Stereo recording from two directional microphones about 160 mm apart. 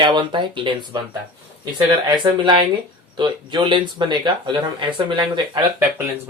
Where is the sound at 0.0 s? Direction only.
30° right (ahead or behind).